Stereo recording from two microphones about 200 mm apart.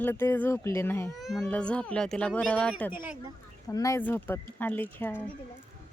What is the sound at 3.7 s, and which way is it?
Speech, 15° left (ahead or behind).